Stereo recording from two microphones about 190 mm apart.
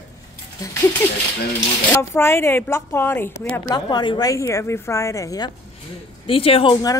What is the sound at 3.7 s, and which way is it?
Speech, 20° left (ahead or behind).